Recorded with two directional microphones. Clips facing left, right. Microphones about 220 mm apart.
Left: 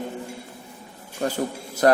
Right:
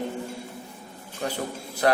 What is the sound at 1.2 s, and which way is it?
Speech, 45° left (ahead or behind).